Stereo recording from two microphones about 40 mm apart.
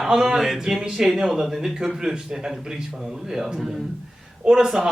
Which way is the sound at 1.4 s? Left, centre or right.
Centre.